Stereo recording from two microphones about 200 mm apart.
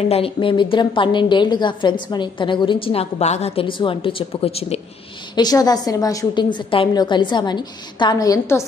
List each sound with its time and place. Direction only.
0.1 s a woman's voice: 25° left (ahead or behind)
5.3 s a woman's voice: 20° left (ahead or behind)